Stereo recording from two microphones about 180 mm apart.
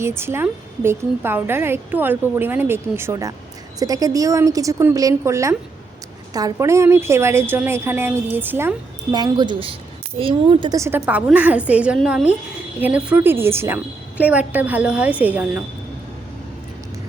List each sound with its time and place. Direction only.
0.0 s a woman's voice: 15° right (ahead or behind)
9.1 s a woman's voice: 25° right (ahead or behind)
10.8 s a woman's voice: 15° right (ahead or behind)